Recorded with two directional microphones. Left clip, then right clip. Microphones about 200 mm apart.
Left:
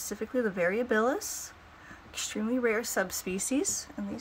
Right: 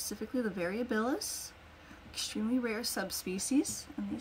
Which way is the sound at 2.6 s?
20° left (ahead or behind).